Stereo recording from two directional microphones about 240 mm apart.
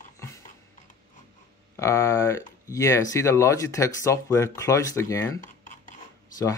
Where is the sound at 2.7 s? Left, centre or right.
Centre.